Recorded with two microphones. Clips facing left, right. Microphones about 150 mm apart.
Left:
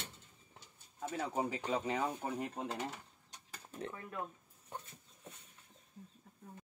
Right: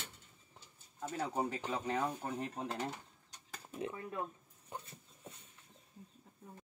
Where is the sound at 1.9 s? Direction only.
15° left (ahead or behind).